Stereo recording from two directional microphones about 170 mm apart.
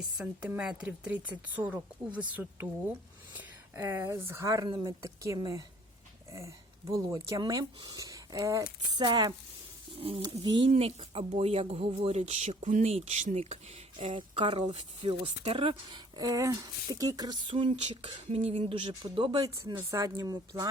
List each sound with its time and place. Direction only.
0.2 s speech: 5° right (ahead or behind)